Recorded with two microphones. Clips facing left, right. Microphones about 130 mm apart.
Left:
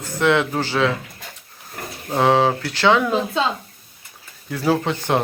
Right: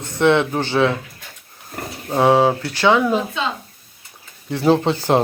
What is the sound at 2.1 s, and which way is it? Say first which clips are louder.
Speech: right 2 dB; 10° right (ahead or behind).